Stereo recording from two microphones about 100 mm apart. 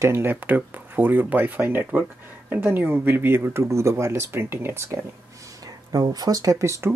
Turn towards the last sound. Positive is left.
turn(degrees=-30)  # may be behind; listen again after turning